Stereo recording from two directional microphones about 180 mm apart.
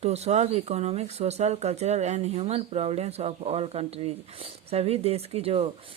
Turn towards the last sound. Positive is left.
turn(degrees=-35)  # may be behind; listen again after turning